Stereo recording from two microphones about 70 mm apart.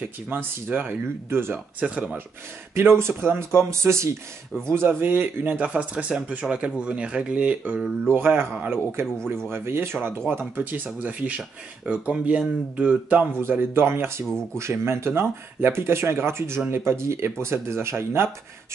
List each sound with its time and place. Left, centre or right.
0.3 s speech: right
2.7 s speech: right; by 8.1 s centre
8.1 s speech: right
13.4 s speech: right